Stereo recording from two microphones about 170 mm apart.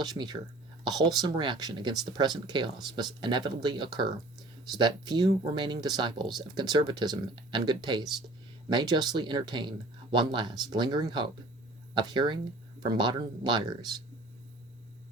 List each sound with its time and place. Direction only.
0.0 s speech: 25° right (ahead or behind)